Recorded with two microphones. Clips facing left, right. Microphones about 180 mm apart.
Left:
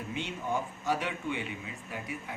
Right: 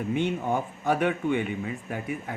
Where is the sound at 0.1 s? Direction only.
55° right (ahead or behind).